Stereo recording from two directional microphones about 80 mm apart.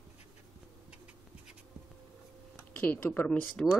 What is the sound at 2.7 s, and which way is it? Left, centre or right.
Speech, left.